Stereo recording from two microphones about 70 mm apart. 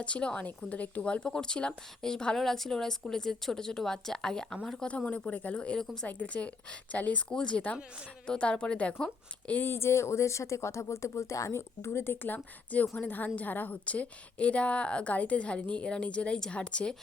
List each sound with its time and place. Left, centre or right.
0.0 s a woman's voice: centre
4.9 s a woman's voice: centre
6.1 s a woman's voice: centre
9.5 s a woman's voice: left